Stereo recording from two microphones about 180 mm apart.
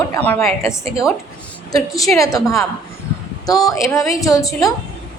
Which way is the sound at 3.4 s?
20° left (ahead or behind).